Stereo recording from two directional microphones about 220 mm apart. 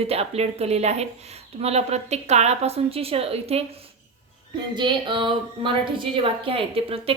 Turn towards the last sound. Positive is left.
turn(degrees=-25)  # may be behind; listen again after turning